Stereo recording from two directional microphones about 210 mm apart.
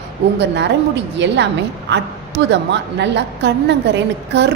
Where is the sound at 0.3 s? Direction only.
55° right (ahead or behind).